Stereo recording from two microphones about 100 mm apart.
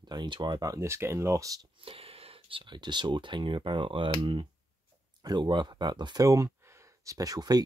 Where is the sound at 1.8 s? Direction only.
70° right (ahead or behind).